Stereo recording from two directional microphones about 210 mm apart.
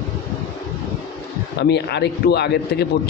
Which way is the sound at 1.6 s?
55° left (ahead or behind).